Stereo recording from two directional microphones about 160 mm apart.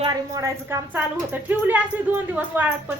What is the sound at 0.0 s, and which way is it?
Speech, 25° right (ahead or behind).